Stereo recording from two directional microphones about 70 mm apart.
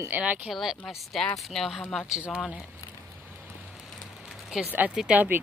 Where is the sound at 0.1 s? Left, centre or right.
Right.